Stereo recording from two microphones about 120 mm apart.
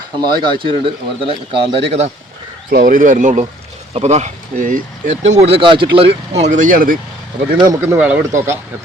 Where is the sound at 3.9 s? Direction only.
65° right (ahead or behind); by 6.4 s 50° right (ahead or behind).